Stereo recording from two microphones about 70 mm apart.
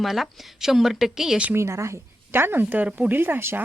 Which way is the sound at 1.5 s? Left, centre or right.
Right.